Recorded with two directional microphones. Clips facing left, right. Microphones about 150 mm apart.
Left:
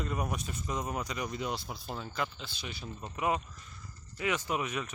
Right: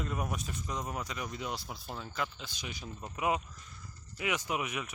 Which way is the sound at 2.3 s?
15° right (ahead or behind).